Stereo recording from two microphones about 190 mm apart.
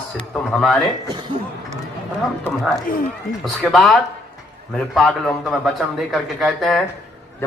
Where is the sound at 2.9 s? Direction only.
50° left (ahead or behind).